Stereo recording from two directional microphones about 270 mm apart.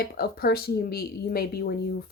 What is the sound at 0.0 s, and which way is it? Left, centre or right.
Speech, left.